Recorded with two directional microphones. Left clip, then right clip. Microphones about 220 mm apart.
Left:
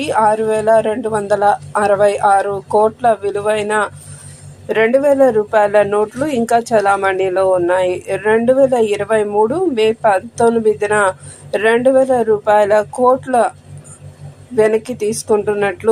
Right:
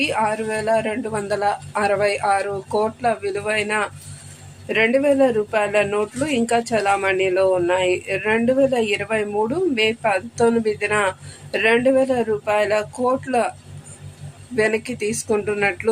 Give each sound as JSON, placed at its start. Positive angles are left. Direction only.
{"t": 0.1, "sound": "speech", "side_deg": 10}
{"t": 14.8, "sound": "speech", "side_deg": 60}
{"t": 15.3, "sound": "speech", "side_deg": 10}